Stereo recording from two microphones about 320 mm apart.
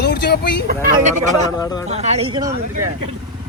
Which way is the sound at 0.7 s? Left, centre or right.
Right.